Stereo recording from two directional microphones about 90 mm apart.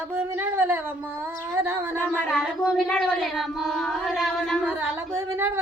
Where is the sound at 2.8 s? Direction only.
10° left (ahead or behind).